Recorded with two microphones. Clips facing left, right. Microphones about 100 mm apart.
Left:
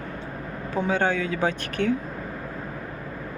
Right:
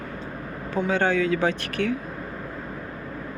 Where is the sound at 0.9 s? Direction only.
15° left (ahead or behind).